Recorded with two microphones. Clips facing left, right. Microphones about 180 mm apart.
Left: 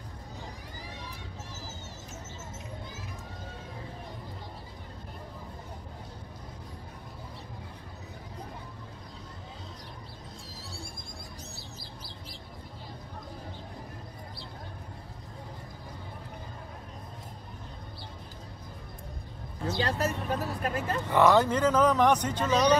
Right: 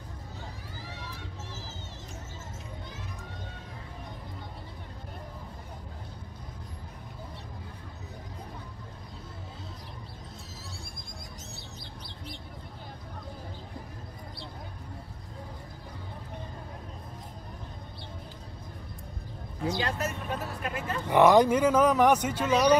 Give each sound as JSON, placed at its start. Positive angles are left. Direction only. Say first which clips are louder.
{"t": 19.8, "sound": "speech", "louder": "left 2 dB", "side_deg": 35}
{"t": 21.1, "sound": "speech", "louder": "right 3 dB", "side_deg": -15}